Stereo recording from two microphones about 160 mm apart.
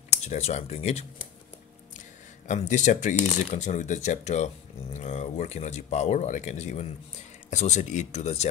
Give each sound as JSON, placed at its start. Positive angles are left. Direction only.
{"t": 0.1, "sound": "speech", "side_deg": 45}